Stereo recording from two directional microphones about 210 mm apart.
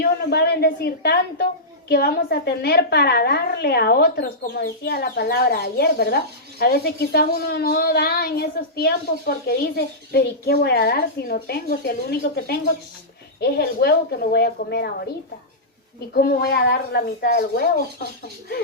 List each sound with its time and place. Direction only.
0.0 s a woman's voice: 50° left (ahead or behind)
13.4 s a woman's voice: 50° left (ahead or behind)
16.1 s a woman's voice: 50° left (ahead or behind)